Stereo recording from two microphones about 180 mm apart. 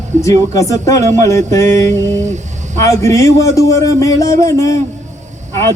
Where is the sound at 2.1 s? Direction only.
40° right (ahead or behind).